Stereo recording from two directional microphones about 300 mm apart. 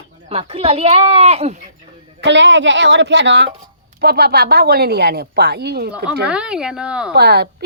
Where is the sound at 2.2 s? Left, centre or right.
Right.